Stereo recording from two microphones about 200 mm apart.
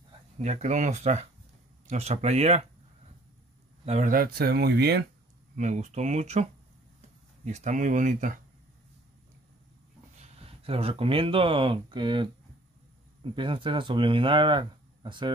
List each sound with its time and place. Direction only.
0.4 s speech: 35° right (ahead or behind)
3.8 s speech: 30° right (ahead or behind)
4.1 s speech: 50° right (ahead or behind)
5.6 s speech: 35° right (ahead or behind)
10.2 s speech: 30° right (ahead or behind)